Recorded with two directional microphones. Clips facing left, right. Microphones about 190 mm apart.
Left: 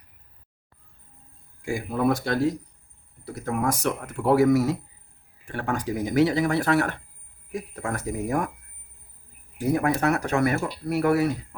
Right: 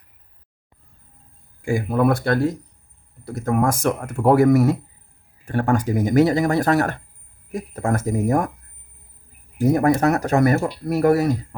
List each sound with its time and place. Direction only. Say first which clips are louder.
1.6 s speech: right 5 dB; 55° right (ahead or behind)
9.7 s speech: right 4 dB; 40° right (ahead or behind)